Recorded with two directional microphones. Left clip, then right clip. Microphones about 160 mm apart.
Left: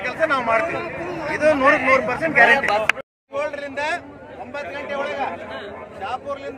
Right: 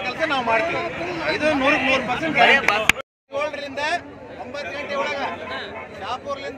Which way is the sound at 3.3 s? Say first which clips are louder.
Even; centre (ahead or behind).